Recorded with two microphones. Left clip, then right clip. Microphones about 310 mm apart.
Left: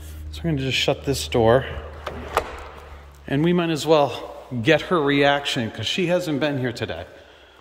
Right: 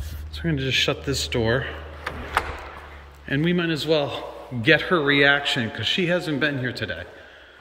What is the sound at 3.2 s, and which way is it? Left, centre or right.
Speech, centre.